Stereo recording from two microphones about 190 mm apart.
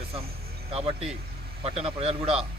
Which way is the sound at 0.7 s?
30° right (ahead or behind).